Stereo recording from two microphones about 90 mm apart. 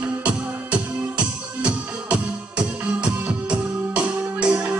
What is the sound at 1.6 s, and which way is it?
Music, 10° right (ahead or behind).